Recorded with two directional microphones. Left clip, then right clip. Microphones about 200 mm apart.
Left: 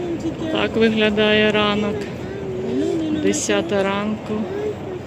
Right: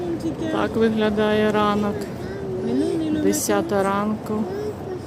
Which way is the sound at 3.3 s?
Centre (ahead or behind).